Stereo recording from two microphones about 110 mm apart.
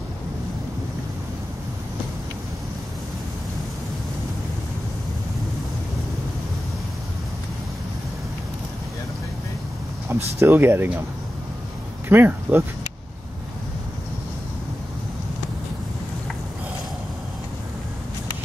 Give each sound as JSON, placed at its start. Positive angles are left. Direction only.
{"t": 10.0, "sound": "speech", "side_deg": -20}
{"t": 12.1, "sound": "speech", "side_deg": -20}